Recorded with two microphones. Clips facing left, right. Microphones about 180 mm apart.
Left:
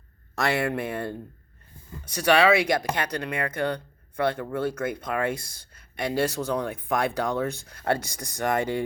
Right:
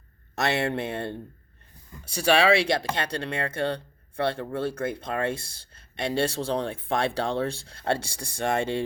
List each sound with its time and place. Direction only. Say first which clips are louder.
0.3 s speech: even; 25° right (ahead or behind)
2.1 s speech: left 1 dB; 30° right (ahead or behind)